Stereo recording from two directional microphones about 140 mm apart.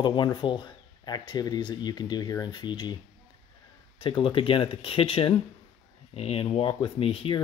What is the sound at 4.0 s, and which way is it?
Speech, 40° left (ahead or behind).